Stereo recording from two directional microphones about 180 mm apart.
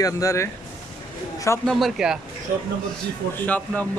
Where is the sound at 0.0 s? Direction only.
15° left (ahead or behind).